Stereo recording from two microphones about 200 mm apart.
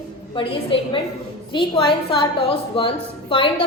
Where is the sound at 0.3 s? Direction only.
25° left (ahead or behind).